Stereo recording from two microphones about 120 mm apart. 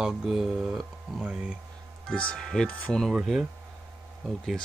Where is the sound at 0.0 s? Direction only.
5° right (ahead or behind).